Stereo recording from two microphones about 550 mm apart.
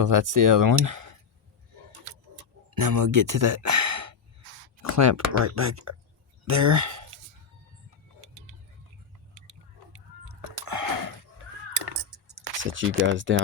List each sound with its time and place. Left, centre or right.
0.0 s speech: right
2.7 s speech: right
9.3 s a sound: right
10.7 s gasp: right
12.7 s speech: right